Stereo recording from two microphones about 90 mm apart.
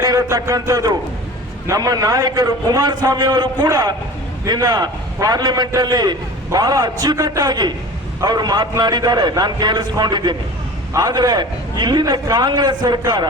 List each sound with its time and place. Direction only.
0.0 s a man's voice: 40° right (ahead or behind); by 13.2 s 60° right (ahead or behind)